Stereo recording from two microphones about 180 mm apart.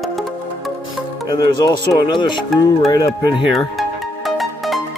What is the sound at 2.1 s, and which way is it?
Speech, 25° left (ahead or behind).